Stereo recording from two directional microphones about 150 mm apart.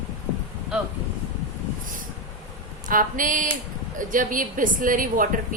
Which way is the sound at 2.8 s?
60° right (ahead or behind).